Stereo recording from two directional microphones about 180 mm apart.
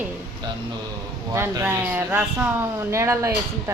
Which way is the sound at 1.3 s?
15° right (ahead or behind).